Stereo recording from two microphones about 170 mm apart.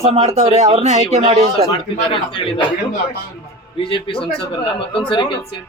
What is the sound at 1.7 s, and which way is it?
Speech, 30° left (ahead or behind).